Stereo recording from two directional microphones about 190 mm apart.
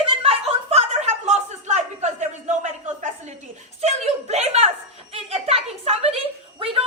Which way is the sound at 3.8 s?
35° right (ahead or behind).